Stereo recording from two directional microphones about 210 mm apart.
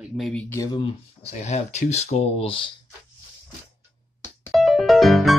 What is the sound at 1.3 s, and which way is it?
Speech, 35° left (ahead or behind).